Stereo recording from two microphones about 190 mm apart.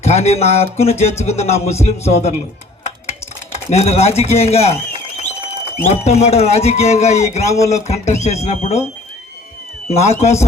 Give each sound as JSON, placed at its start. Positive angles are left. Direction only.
{"t": 0.0, "sound": "a man's voice", "side_deg": 35}
{"t": 2.8, "sound": "dishes", "side_deg": 35}
{"t": 5.8, "sound": "a man's voice", "side_deg": 35}
{"t": 9.9, "sound": "a man's voice", "side_deg": 35}